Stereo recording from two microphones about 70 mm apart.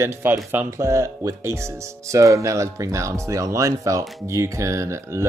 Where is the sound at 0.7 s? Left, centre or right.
Right.